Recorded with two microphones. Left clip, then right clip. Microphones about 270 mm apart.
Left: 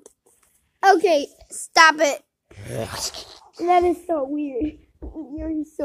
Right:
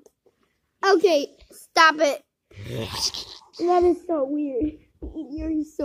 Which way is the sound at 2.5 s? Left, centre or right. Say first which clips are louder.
Left 2 dB; right.